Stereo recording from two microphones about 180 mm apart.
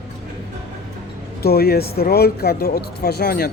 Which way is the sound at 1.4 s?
60° left (ahead or behind).